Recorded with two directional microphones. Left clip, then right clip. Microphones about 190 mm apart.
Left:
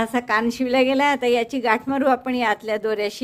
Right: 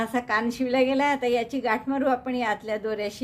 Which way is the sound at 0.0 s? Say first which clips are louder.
Left 4 dB; 35° left (ahead or behind).